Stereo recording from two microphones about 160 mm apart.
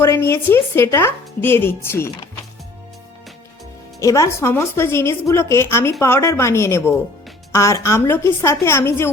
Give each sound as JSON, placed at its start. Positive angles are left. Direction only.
{"t": 0.0, "sound": "speech", "side_deg": 15}
{"t": 4.0, "sound": "speech", "side_deg": 20}